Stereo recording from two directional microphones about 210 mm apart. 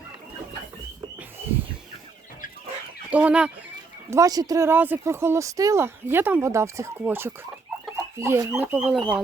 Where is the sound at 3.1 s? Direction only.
5° right (ahead or behind).